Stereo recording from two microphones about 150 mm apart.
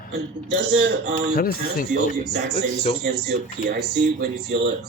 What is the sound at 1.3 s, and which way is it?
Speech, 75° left (ahead or behind).